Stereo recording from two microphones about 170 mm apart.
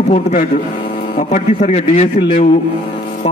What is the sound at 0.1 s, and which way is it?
A man's voice, 50° left (ahead or behind).